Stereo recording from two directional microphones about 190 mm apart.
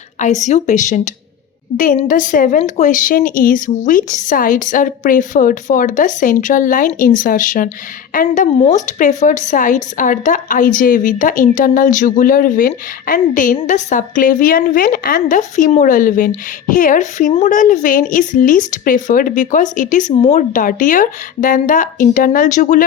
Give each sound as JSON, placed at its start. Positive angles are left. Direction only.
{"t": 0.2, "sound": "a woman's voice", "side_deg": 40}